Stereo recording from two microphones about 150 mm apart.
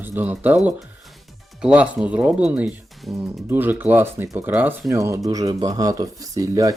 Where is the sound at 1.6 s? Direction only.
5° right (ahead or behind).